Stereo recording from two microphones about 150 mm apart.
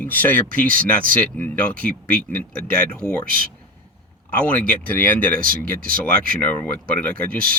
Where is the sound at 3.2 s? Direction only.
70° right (ahead or behind).